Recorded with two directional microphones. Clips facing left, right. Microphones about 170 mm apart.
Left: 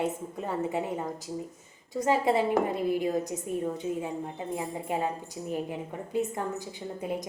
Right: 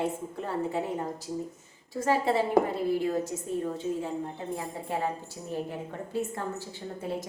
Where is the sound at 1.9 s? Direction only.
20° left (ahead or behind).